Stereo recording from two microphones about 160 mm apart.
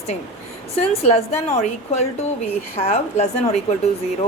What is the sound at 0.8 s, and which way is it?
A woman's voice, 40° left (ahead or behind).